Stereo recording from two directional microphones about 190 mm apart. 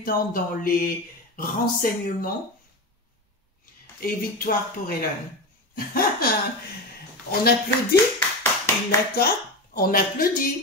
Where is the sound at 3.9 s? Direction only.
50° left (ahead or behind).